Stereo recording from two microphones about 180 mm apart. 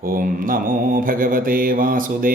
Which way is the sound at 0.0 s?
50° right (ahead or behind).